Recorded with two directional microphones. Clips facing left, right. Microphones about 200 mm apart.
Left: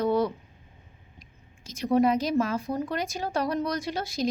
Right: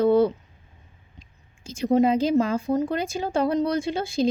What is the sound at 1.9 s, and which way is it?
Speech, 25° right (ahead or behind).